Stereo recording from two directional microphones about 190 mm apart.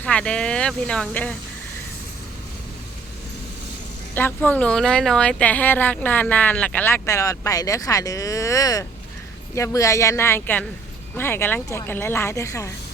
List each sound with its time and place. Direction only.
0.0 s speech: 5° left (ahead or behind)
4.1 s speech: 10° left (ahead or behind)